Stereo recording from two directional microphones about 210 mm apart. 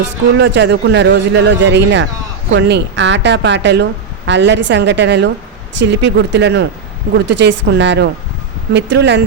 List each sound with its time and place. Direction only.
0.3 s speech: 55° right (ahead or behind)